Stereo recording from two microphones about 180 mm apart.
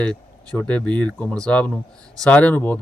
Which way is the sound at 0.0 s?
5° left (ahead or behind).